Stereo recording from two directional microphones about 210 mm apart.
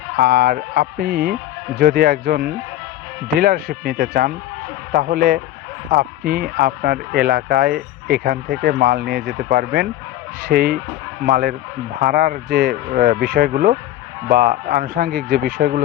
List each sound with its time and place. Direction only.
0.2 s speech: 45° right (ahead or behind)